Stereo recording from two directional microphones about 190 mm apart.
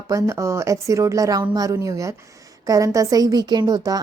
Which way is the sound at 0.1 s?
15° right (ahead or behind).